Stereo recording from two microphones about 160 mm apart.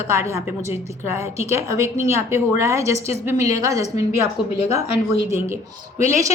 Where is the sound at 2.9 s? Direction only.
40° left (ahead or behind).